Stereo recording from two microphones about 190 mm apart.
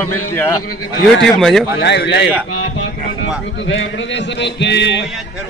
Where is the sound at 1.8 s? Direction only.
65° left (ahead or behind).